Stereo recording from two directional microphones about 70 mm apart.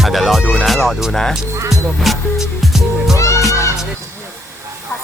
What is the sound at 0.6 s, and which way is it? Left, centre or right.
Speech, centre.